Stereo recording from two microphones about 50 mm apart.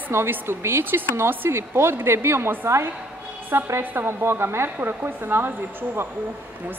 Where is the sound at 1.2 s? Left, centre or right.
Right.